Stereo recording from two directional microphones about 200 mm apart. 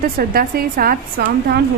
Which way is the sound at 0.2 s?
45° right (ahead or behind).